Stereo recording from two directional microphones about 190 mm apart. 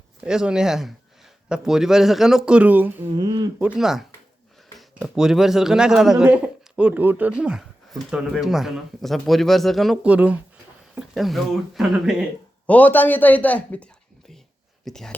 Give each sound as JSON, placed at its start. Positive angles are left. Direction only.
{"t": 0.2, "sound": "speech", "side_deg": -5}
{"t": 3.2, "sound": "speech", "side_deg": -20}
{"t": 3.6, "sound": "a man's voice", "side_deg": 0}
{"t": 14.8, "sound": "speech", "side_deg": 0}